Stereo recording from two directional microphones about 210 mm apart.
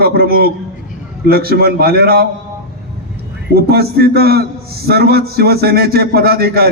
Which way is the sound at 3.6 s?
50° right (ahead or behind).